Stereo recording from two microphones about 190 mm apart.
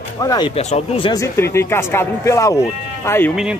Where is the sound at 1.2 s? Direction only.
15° left (ahead or behind).